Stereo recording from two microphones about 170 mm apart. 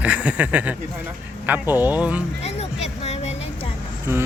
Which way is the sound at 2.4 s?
40° left (ahead or behind).